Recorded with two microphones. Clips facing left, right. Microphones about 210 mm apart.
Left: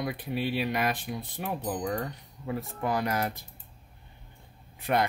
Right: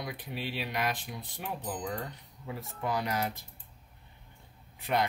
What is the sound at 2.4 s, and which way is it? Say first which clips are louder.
Speech: left 5 dB; 55° left (ahead or behind).